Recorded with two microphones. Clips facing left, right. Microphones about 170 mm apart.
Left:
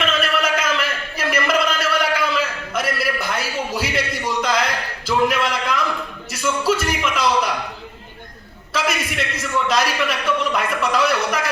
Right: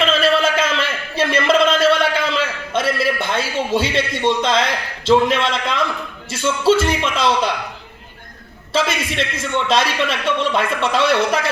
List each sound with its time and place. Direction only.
0.0 s a sound: 30° right (ahead or behind)
6.3 s a man's voice: 30° right (ahead or behind)
8.7 s a man's voice: 30° right (ahead or behind)